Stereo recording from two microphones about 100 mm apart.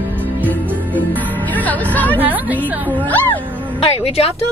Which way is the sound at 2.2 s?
15° right (ahead or behind).